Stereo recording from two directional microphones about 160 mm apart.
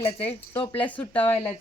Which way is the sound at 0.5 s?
30° left (ahead or behind).